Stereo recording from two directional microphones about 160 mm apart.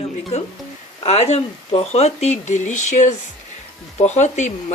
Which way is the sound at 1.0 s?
40° left (ahead or behind).